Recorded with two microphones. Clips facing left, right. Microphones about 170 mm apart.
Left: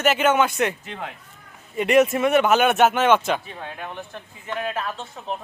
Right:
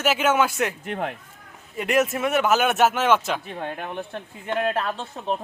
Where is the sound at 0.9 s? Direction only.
55° right (ahead or behind).